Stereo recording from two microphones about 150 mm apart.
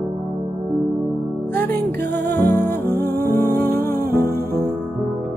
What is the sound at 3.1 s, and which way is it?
Music, 90° right.